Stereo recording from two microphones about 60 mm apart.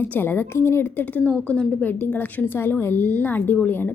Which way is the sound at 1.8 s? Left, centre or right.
Left.